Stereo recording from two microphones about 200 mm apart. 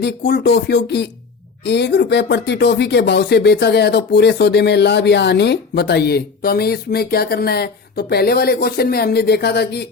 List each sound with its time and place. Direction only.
0.0 s speech: 50° left (ahead or behind)